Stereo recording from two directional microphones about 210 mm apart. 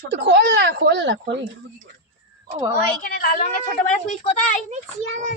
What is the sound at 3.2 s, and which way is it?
Speech, 40° left (ahead or behind).